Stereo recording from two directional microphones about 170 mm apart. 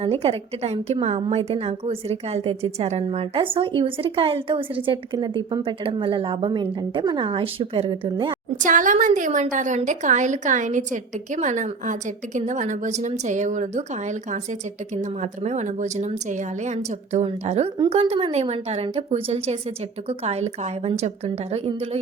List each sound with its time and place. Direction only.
0.0 s a woman's voice: 35° right (ahead or behind)
8.6 s a woman's voice: 50° right (ahead or behind)